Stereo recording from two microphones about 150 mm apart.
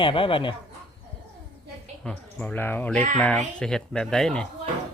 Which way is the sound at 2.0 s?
5° left (ahead or behind).